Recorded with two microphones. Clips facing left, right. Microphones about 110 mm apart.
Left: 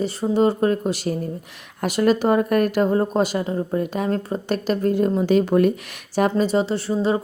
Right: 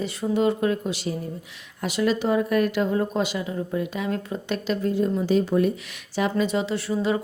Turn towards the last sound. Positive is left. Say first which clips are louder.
# left 3 dB
turn(degrees=30)  # may be behind; listen again after turning